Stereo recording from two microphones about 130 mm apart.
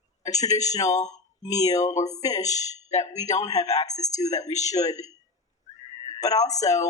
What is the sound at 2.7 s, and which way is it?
Speech, 60° left (ahead or behind).